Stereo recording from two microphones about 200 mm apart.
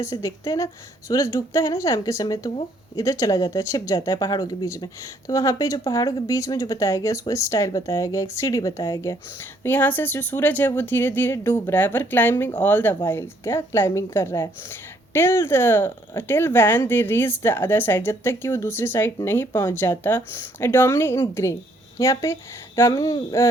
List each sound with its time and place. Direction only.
0.0 s a woman's voice: 15° left (ahead or behind)